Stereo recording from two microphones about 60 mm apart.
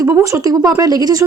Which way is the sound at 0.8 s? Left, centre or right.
Right.